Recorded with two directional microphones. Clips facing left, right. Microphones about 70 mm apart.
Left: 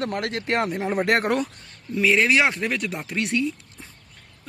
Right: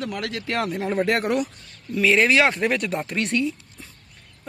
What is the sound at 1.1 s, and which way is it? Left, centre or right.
Speech, left.